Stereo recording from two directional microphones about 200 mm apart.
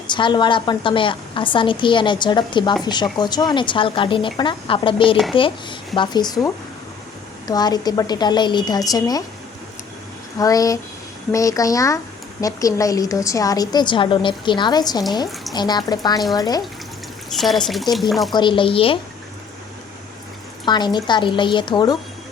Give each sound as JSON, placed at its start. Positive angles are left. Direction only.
{"t": 0.1, "sound": "a woman's voice", "side_deg": 25}
{"t": 10.3, "sound": "a woman's voice", "side_deg": 15}
{"t": 17.3, "sound": "speech", "side_deg": 0}
{"t": 18.3, "sound": "a woman's voice", "side_deg": 25}
{"t": 20.7, "sound": "a woman's voice", "side_deg": 20}